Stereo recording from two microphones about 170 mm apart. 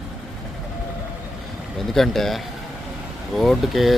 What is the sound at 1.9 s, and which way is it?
Speech, centre (ahead or behind).